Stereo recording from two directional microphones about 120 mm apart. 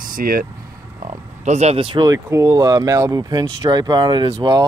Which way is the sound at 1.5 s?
65° right (ahead or behind).